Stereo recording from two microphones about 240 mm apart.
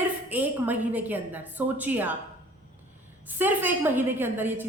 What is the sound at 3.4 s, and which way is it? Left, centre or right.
A woman's voice, centre.